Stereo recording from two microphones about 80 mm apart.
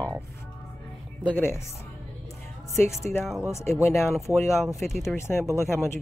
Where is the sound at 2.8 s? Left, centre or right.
Left.